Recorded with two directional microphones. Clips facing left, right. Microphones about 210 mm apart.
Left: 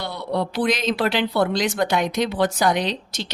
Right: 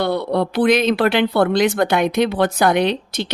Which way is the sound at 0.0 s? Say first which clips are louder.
Right 7 dB; 60° right (ahead or behind).